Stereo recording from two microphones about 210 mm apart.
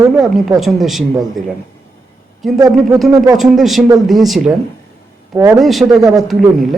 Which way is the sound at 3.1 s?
15° right (ahead or behind).